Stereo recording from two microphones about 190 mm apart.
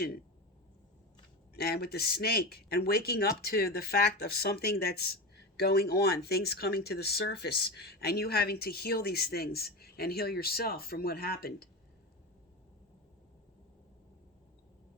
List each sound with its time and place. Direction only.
1.5 s speech: 55° left (ahead or behind)